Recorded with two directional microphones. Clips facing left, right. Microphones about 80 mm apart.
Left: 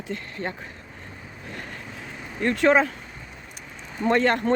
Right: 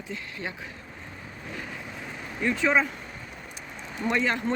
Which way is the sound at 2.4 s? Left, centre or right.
Left.